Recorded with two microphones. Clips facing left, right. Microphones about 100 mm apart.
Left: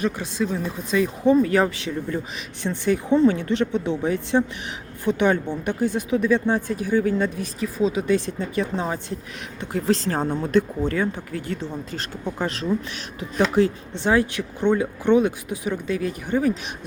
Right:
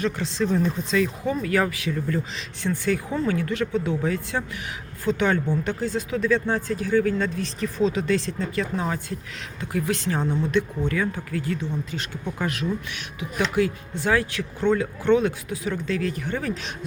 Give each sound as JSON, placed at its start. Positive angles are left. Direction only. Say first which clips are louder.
{"t": 0.0, "sound": "speech", "louder": "left 1 dB", "side_deg": 15}
{"t": 0.4, "sound": "speech", "louder": "right 3 dB", "side_deg": 5}
{"t": 0.9, "sound": "speech", "louder": "left 5 dB", "side_deg": 20}
{"t": 11.0, "sound": "speech", "louder": "left 1 dB", "side_deg": 25}
{"t": 14.0, "sound": "speech", "louder": "left 3 dB", "side_deg": 20}